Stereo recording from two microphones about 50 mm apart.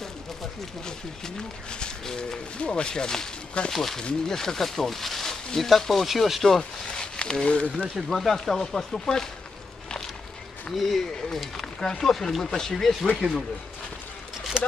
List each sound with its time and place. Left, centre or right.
0.8 s speech: centre
7.0 s a sound: centre
7.9 s speech: centre
10.9 s speech: centre
13.2 s speech: right